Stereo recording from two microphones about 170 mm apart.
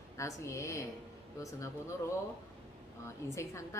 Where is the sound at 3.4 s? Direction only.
15° left (ahead or behind).